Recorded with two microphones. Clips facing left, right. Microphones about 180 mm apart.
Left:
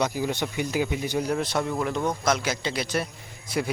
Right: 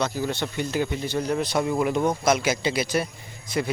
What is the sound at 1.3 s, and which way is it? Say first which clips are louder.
A man's voice: right 2 dB; centre (ahead or behind).